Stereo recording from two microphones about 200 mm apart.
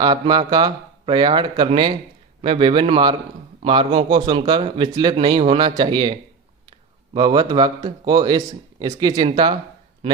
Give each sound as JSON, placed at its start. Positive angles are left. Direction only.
{"t": 0.0, "sound": "a man's voice", "side_deg": -20}